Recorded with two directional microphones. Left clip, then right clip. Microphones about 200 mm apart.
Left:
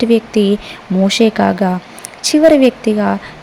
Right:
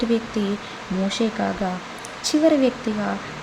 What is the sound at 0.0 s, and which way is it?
Speech, 35° left (ahead or behind).